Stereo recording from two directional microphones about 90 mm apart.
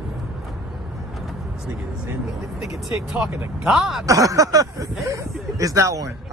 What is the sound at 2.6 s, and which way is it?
Speech, 5° right (ahead or behind).